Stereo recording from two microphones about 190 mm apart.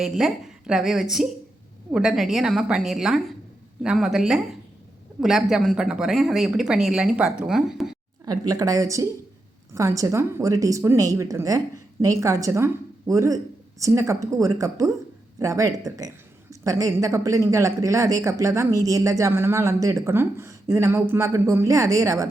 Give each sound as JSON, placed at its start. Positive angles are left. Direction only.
{"t": 0.0, "sound": "speech", "side_deg": 0}
{"t": 8.2, "sound": "speech", "side_deg": -20}